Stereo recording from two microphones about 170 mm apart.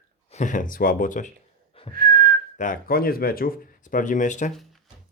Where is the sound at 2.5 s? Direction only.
50° left (ahead or behind).